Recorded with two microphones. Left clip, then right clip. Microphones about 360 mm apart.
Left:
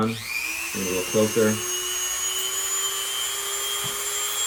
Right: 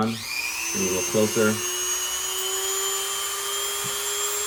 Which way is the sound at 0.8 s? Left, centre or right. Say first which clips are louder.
Even; centre.